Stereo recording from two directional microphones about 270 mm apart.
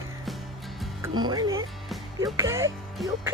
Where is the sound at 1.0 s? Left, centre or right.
Centre.